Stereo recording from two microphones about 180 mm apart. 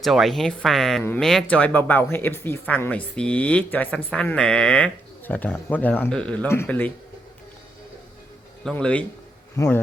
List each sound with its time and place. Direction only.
0.0 s speech: centre (ahead or behind)
8.6 s speech: 5° left (ahead or behind)
9.6 s speech: 20° left (ahead or behind)